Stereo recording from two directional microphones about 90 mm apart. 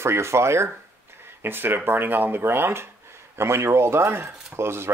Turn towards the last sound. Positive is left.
turn(degrees=-30)  # may be behind; listen again after turning